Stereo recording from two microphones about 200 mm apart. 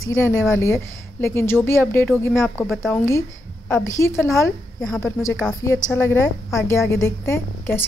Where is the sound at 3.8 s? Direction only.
15° left (ahead or behind).